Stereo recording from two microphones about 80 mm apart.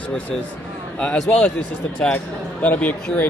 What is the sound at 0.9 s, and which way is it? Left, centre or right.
Speech, centre.